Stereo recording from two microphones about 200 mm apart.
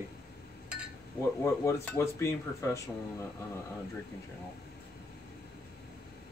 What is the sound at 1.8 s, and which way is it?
Speech, 15° left (ahead or behind).